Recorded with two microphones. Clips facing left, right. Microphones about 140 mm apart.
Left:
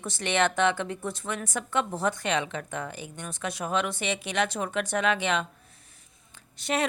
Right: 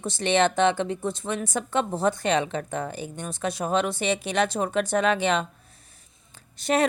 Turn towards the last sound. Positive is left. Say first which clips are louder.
# right 5 dB
turn(degrees=-40)  # may be behind; listen again after turning